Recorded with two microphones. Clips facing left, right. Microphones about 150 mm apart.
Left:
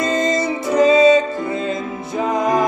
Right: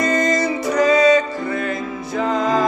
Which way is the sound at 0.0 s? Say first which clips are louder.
Even; 25° left (ahead or behind).